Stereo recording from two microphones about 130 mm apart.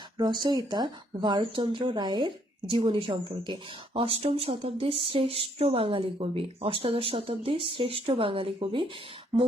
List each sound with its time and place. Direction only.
0.2 s speech: 35° right (ahead or behind)